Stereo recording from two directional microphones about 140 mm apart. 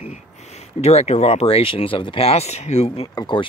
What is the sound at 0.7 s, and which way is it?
Speech, 50° left (ahead or behind).